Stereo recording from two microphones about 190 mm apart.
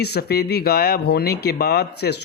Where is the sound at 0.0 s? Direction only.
55° left (ahead or behind).